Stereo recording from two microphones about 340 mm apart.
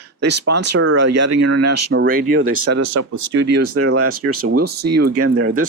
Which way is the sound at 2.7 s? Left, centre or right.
Right.